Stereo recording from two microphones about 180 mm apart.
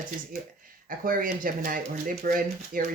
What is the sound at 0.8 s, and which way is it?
Speech, 50° right (ahead or behind).